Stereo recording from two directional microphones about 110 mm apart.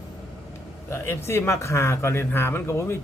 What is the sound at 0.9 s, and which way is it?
Speech, 25° left (ahead or behind).